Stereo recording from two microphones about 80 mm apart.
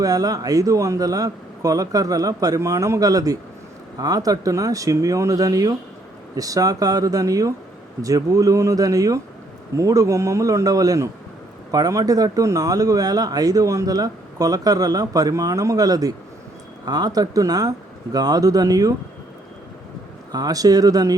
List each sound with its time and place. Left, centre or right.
0.0 s speech: right
20.3 s speech: right